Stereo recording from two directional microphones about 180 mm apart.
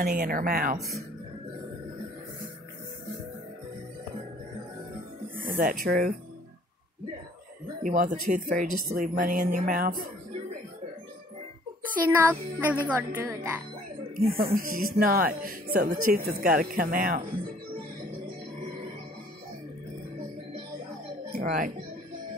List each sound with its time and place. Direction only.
0.0 s speech: 55° right (ahead or behind)
5.6 s speech: 50° right (ahead or behind)
7.8 s speech: 50° right (ahead or behind)
11.8 s a woman's voice: 10° right (ahead or behind)
14.1 s speech: 55° right (ahead or behind)
21.3 s speech: 50° right (ahead or behind)